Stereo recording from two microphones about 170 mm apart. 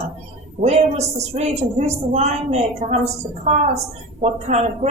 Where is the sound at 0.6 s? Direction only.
40° right (ahead or behind).